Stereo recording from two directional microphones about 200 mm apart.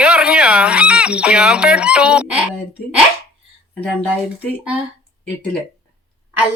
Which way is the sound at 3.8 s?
10° left (ahead or behind).